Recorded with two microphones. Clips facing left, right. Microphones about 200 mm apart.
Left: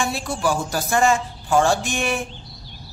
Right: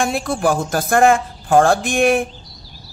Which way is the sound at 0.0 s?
50° right (ahead or behind).